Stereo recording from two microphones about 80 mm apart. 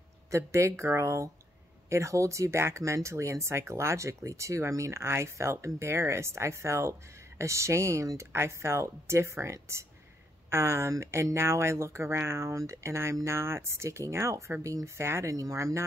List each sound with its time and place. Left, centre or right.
0.3 s speech: right